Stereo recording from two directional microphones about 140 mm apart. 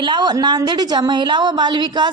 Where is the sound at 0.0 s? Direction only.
35° right (ahead or behind).